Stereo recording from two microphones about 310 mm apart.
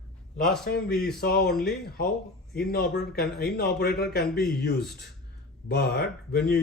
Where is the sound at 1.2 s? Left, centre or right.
Left.